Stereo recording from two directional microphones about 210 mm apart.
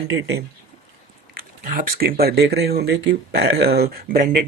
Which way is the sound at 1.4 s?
40° right (ahead or behind).